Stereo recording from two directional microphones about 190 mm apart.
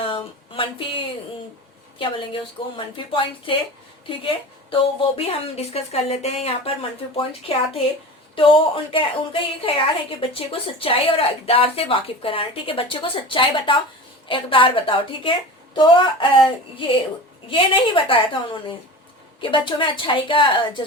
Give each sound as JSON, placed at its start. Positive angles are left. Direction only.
{"t": 0.0, "sound": "a sound", "side_deg": 30}
{"t": 2.0, "sound": "a woman's voice", "side_deg": 25}
{"t": 19.4, "sound": "a woman's voice", "side_deg": 25}